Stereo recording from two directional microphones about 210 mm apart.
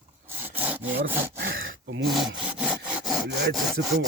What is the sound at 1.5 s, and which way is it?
Gasp, 70° right (ahead or behind).